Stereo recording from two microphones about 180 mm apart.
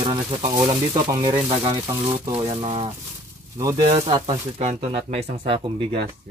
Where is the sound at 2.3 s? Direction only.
35° right (ahead or behind).